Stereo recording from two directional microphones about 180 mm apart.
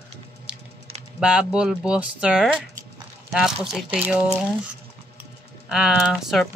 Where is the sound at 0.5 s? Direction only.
5° right (ahead or behind).